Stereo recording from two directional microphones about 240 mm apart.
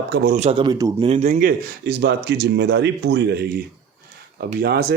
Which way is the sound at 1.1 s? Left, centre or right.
Right.